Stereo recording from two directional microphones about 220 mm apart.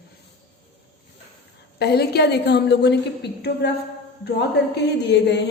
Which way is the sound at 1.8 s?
50° left (ahead or behind).